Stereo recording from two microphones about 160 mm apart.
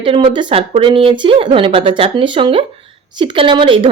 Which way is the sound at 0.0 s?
35° right (ahead or behind).